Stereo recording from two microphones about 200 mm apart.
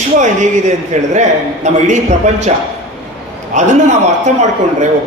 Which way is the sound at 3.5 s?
35° right (ahead or behind).